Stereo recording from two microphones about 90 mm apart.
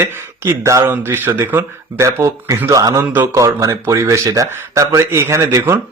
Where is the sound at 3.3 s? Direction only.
35° right (ahead or behind).